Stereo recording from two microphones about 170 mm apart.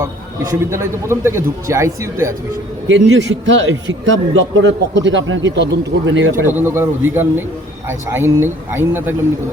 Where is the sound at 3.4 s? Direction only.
90° right.